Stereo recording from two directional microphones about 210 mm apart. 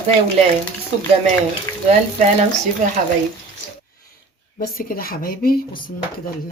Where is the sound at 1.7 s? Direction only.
10° left (ahead or behind).